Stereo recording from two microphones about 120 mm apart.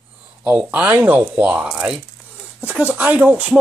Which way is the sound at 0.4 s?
15° right (ahead or behind).